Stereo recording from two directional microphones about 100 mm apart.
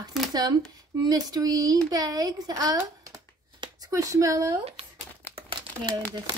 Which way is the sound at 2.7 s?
30° right (ahead or behind).